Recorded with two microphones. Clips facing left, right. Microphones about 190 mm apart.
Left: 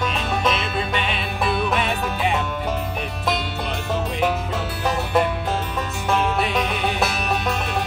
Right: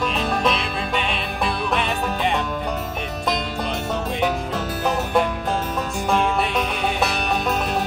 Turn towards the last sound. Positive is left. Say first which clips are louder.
# right 2 dB
turn(degrees=0)  # may be behind; listen again after turning